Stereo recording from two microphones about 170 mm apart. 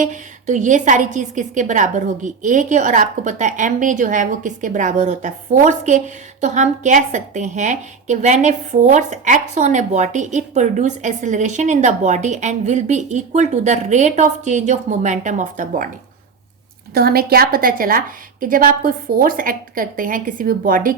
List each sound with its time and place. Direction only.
0.0 s a woman's voice: 45° right (ahead or behind)
16.9 s a woman's voice: 65° right (ahead or behind)